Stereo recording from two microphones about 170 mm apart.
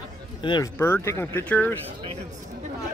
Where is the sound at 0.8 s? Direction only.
15° left (ahead or behind).